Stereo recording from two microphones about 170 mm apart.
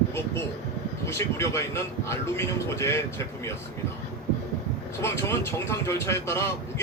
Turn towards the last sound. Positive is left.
turn(degrees=15)  # may be behind; listen again after turning